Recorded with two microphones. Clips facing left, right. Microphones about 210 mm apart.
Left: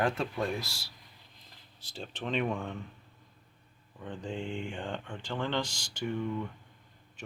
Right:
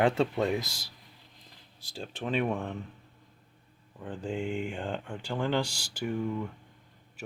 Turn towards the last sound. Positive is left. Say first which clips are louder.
# right 4 dB
turn(degrees=-10)  # may be behind; listen again after turning